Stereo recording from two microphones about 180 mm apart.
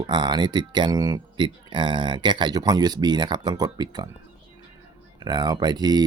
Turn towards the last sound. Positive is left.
turn(degrees=-20)  # may be behind; listen again after turning